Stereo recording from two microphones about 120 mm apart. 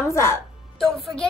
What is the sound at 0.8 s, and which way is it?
Speech, centre (ahead or behind).